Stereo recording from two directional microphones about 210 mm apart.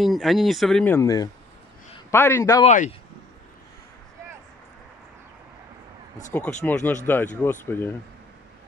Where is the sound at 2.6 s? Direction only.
30° left (ahead or behind).